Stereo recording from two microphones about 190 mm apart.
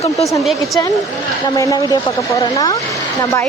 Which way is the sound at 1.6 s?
20° left (ahead or behind).